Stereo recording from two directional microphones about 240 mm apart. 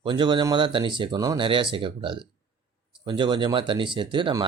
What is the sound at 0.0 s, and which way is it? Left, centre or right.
Speech, centre.